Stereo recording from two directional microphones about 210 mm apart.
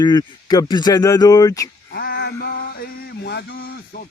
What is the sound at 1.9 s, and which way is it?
Music, 50° left (ahead or behind).